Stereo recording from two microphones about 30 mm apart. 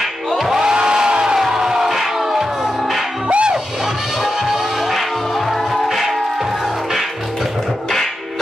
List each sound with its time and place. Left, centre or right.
0.6 s a sound: right
1.4 s music: centre
3.3 s music: right
4.2 s music: centre